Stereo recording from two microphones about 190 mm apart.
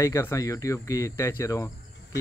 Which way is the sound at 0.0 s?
15° left (ahead or behind).